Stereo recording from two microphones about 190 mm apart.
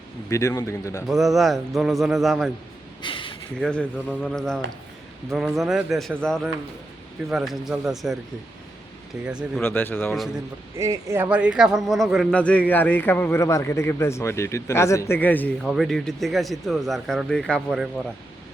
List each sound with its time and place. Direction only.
0.3 s a man's voice: 15° left (ahead or behind)
1.0 s speech: centre (ahead or behind)
3.0 s a sound: 25° left (ahead or behind)
3.6 s speech: 5° left (ahead or behind)
9.6 s a man's voice: 10° left (ahead or behind)
10.8 s a man's voice: 15° right (ahead or behind); by 15.5 s 10° left (ahead or behind)
15.6 s speech: centre (ahead or behind)